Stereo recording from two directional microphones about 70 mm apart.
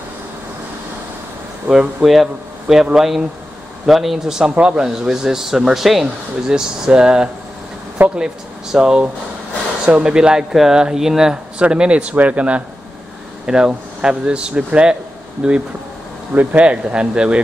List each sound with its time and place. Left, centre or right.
1.7 s speech: centre
8.0 s speech: right
8.7 s speech: centre